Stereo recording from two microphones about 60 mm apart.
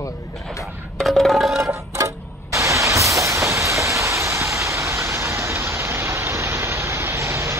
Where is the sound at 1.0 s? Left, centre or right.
Centre.